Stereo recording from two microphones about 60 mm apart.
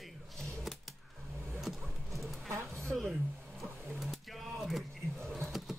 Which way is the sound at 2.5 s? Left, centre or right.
Right.